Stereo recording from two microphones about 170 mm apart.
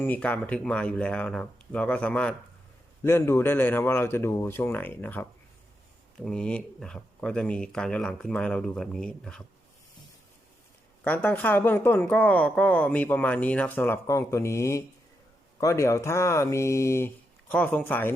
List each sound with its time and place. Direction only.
0.0 s speech: 10° left (ahead or behind)
11.0 s speech: 10° left (ahead or behind)